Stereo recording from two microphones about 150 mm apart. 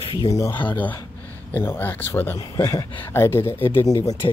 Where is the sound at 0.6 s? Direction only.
10° left (ahead or behind).